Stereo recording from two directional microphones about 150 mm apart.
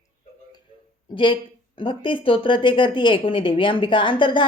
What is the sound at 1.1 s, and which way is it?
Speech, 35° left (ahead or behind).